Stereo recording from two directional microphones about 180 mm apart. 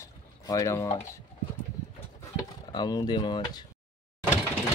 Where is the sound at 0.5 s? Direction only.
15° left (ahead or behind).